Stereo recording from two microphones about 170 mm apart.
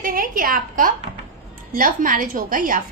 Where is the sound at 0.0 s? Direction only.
55° right (ahead or behind).